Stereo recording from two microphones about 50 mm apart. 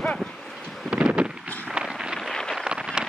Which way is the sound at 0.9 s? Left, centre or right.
Right.